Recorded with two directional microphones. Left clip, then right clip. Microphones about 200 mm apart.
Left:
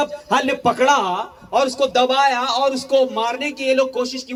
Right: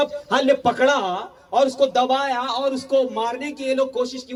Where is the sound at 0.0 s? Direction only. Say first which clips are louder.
Left 1 dB; 55° left (ahead or behind); by 4.1 s 5° left (ahead or behind).